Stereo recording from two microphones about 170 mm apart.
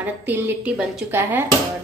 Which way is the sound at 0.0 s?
10° right (ahead or behind).